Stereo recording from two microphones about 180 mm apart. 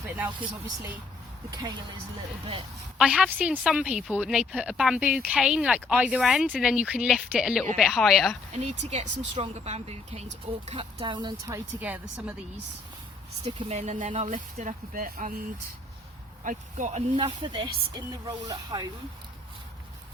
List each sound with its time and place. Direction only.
1.5 s speech: 20° right (ahead or behind)
3.0 s a woman's voice: 5° right (ahead or behind)
8.5 s speech: 40° right (ahead or behind); by 12.3 s 10° right (ahead or behind)
13.4 s speech: 35° right (ahead or behind)
17.2 s speech: 25° right (ahead or behind)